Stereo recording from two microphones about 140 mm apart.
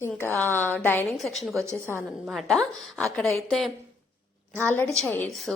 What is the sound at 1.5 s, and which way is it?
Speech, 20° right (ahead or behind).